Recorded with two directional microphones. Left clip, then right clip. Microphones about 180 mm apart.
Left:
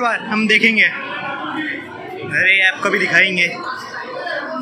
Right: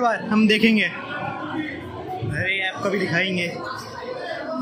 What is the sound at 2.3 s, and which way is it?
A man's voice, 10° right (ahead or behind).